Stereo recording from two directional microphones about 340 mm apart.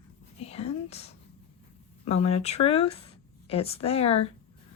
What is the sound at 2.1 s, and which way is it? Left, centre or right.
Speech, centre.